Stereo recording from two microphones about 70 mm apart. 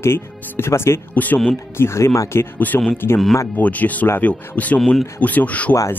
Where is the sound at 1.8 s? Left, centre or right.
Left.